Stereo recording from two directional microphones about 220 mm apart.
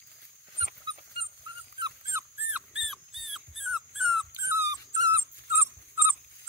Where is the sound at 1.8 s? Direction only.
10° right (ahead or behind).